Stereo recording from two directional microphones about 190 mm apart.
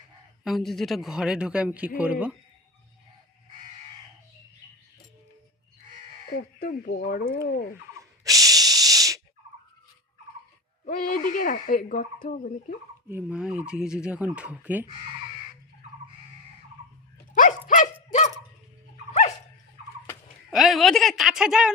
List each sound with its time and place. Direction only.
0.4 s speech: centre (ahead or behind)
6.3 s speech: 50° left (ahead or behind)
7.9 s a sound: 20° right (ahead or behind)
10.8 s speech: 45° left (ahead or behind)
13.1 s speech: 10° right (ahead or behind)
17.7 s dog: 40° left (ahead or behind)
20.5 s speech: centre (ahead or behind)